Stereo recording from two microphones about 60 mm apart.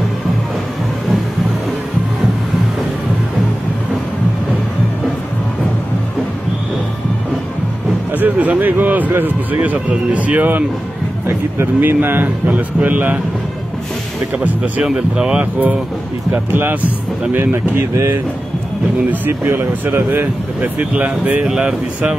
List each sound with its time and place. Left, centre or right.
8.1 s speech: right
11.8 s speech: right
14.4 s speech: right
16.5 s speech: right
19.0 s speech: right
19.5 s speech: right
21.5 s speech: centre